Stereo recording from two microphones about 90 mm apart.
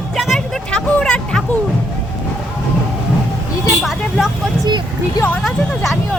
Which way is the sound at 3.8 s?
5° right (ahead or behind).